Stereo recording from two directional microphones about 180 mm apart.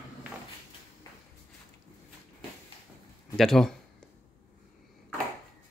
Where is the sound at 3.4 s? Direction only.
Centre (ahead or behind).